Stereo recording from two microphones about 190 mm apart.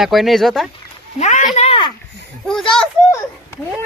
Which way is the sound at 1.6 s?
30° left (ahead or behind).